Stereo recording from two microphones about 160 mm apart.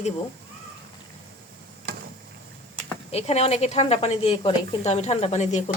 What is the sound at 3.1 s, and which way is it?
A woman's voice, 40° left (ahead or behind).